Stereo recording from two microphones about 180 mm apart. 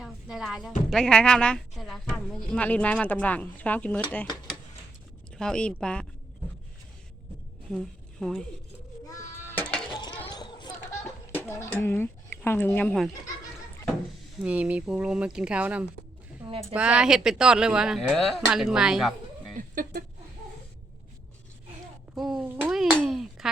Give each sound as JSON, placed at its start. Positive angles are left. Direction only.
{"t": 0.0, "sound": "music", "side_deg": -5}
{"t": 0.9, "sound": "speech", "side_deg": 5}
{"t": 5.4, "sound": "speech", "side_deg": 5}
{"t": 7.7, "sound": "speech", "side_deg": 0}
{"t": 9.0, "sound": "a sound", "side_deg": 15}
{"t": 9.9, "sound": "a sound", "side_deg": 25}
{"t": 11.3, "sound": "speech", "side_deg": 10}
{"t": 14.4, "sound": "speech", "side_deg": -5}
{"t": 16.5, "sound": "a woman's voice", "side_deg": -35}
{"t": 16.7, "sound": "speech", "side_deg": -5}
{"t": 19.7, "sound": "speech", "side_deg": -55}
{"t": 22.1, "sound": "a sound", "side_deg": 0}